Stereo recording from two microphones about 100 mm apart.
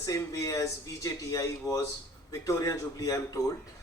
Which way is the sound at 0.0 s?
35° left (ahead or behind).